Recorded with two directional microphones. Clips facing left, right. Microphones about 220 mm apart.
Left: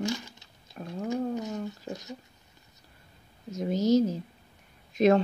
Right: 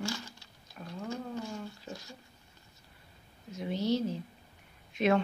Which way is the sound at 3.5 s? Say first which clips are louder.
Left 7 dB; 45° left (ahead or behind).